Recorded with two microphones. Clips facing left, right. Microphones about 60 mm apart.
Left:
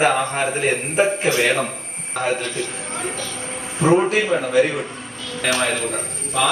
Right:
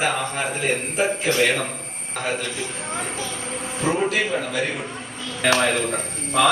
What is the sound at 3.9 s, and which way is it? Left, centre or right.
Speech, left.